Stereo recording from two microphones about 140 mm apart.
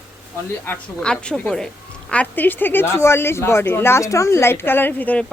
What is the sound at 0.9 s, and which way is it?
A woman's voice, 5° left (ahead or behind).